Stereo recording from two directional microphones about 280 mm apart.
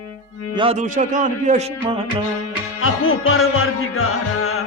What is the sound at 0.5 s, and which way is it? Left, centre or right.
A man's voice, centre.